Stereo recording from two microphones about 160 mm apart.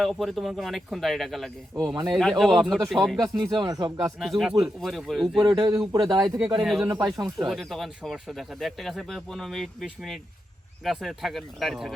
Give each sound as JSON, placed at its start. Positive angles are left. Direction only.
{"t": 0.0, "sound": "speech", "side_deg": 0}
{"t": 3.5, "sound": "speech", "side_deg": -25}
{"t": 4.2, "sound": "speech", "side_deg": 0}
{"t": 5.4, "sound": "speech", "side_deg": -25}
{"t": 6.5, "sound": "speech", "side_deg": 0}
{"t": 6.8, "sound": "speech", "side_deg": -25}
{"t": 7.4, "sound": "speech", "side_deg": 0}